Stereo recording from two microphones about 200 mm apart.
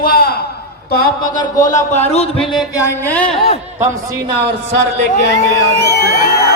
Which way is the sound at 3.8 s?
15° right (ahead or behind).